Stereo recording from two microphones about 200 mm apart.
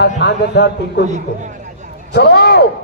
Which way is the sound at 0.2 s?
60° left (ahead or behind).